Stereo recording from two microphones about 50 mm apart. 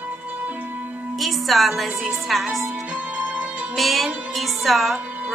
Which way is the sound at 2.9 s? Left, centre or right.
Right.